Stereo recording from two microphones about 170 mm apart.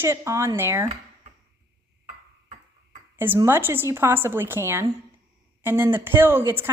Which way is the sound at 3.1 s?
10° right (ahead or behind).